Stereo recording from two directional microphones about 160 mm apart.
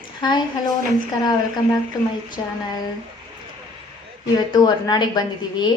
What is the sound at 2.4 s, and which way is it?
Speech, 30° left (ahead or behind).